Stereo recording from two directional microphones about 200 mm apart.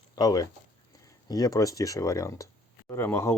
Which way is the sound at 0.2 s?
20° left (ahead or behind).